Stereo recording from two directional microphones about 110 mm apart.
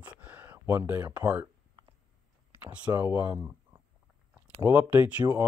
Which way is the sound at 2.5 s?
15° right (ahead or behind).